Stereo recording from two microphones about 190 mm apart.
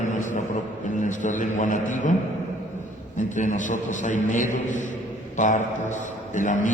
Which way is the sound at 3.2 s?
40° left (ahead or behind).